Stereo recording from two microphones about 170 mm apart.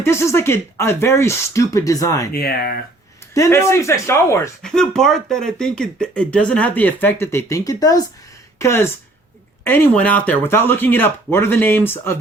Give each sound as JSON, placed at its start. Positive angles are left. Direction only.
{"t": 0.0, "sound": "speech", "side_deg": 15}
{"t": 2.3, "sound": "speech", "side_deg": 65}
{"t": 3.3, "sound": "speech", "side_deg": 20}
{"t": 4.6, "sound": "speech", "side_deg": 5}